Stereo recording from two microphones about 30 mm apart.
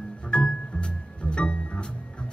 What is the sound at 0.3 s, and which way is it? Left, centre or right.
Music, left.